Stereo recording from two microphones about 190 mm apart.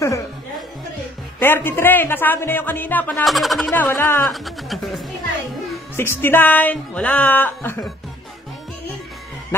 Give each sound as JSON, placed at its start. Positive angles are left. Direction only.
{"t": 1.4, "sound": "speech", "side_deg": 10}
{"t": 5.9, "sound": "speech", "side_deg": 10}
{"t": 9.5, "sound": "speech", "side_deg": 10}